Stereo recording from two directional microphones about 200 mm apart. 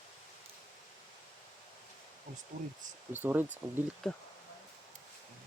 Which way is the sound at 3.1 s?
10° right (ahead or behind).